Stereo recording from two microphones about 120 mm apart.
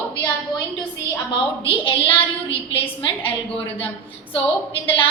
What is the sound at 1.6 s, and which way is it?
A woman's voice, 45° left (ahead or behind).